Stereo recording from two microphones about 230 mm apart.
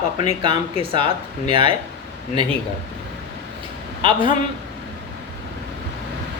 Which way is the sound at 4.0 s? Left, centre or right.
Right.